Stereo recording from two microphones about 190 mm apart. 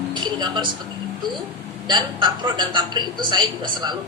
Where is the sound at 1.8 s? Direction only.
25° right (ahead or behind).